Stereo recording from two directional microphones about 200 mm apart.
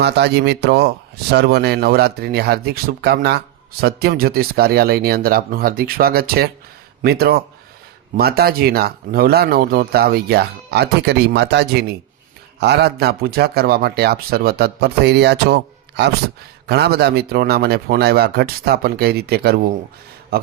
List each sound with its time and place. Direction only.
0.0 s speech: 55° right (ahead or behind)